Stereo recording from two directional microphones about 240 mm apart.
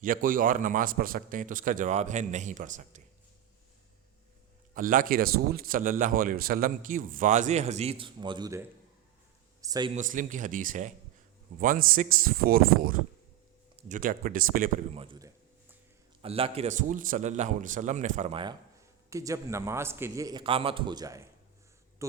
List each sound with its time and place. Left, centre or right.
0.0 s speech: right
4.7 s speech: right; by 9.9 s centre
9.9 s speech: right
15.0 s a man's voice: centre